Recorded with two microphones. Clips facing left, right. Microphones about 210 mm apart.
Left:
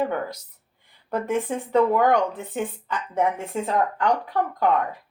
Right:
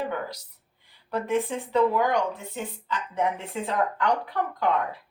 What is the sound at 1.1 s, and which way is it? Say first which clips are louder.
Speech: left 1 dB; 50° left (ahead or behind).